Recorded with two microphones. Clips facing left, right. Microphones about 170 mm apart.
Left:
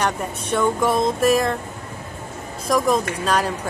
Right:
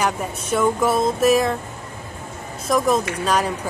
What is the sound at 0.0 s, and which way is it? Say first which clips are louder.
Speech: even; 5° right (ahead or behind).